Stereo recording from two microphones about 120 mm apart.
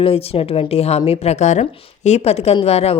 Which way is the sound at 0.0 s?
55° left (ahead or behind).